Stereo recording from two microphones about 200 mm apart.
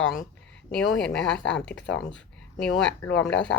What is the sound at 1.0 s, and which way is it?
Speech, 5° left (ahead or behind).